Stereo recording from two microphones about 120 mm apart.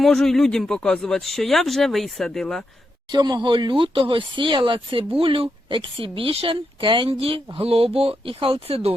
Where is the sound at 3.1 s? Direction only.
35° right (ahead or behind).